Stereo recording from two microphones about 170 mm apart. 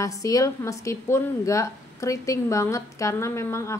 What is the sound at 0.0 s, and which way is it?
A woman's voice, 20° left (ahead or behind).